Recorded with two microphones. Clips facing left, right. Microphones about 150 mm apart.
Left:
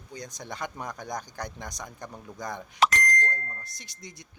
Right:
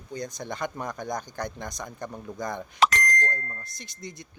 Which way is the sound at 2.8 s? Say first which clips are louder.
Right 1 dB; 80° right.